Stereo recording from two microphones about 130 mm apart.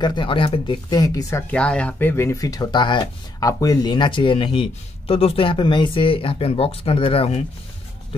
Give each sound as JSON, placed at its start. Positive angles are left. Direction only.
{"t": 0.0, "sound": "speech", "side_deg": 40}
{"t": 1.3, "sound": "speech", "side_deg": 10}